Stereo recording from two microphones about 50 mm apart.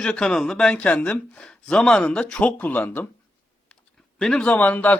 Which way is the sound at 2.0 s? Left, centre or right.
Left.